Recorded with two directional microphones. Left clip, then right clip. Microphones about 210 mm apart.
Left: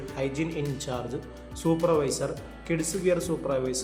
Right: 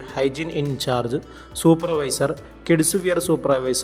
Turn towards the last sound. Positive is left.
turn(degrees=-40)  # may be behind; listen again after turning